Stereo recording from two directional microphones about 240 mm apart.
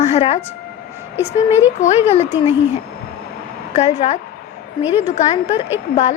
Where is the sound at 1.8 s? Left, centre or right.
Left.